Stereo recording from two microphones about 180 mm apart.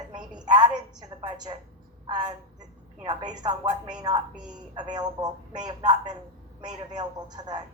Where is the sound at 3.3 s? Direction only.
20° right (ahead or behind).